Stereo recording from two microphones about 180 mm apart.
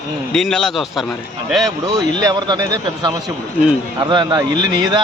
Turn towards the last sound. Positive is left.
turn(degrees=-25)  # may be behind; listen again after turning